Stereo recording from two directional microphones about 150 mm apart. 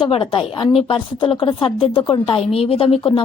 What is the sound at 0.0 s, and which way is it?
Speech, 30° left (ahead or behind).